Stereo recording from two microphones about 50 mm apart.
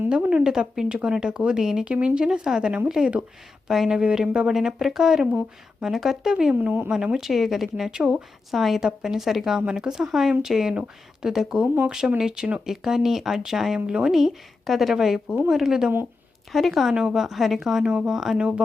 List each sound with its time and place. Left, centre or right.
0.1 s speech: centre
1.9 s speech: right; by 7.9 s centre
7.9 s speech: centre
8.1 s speech: centre
13.7 s speech: centre
14.1 s speech: centre
16.9 s speech: centre
17.2 s speech: centre
17.8 s speech: right
18.1 s speech: centre
18.3 s speech: right